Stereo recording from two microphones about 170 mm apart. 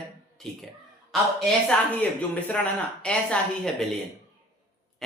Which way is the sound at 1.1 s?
Centre (ahead or behind).